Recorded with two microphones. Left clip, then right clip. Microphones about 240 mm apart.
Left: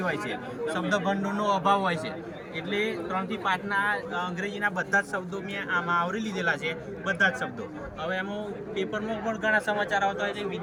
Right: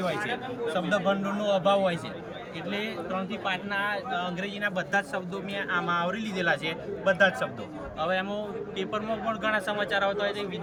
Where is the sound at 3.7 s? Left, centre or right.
Centre.